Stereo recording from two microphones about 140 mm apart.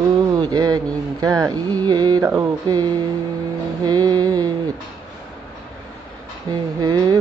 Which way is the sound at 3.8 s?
30° right (ahead or behind).